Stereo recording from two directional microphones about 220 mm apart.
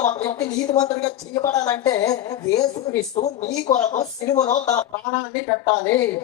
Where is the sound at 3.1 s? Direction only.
30° left (ahead or behind).